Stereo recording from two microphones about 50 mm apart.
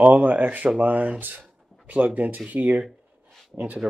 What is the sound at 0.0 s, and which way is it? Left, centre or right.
Speech, right.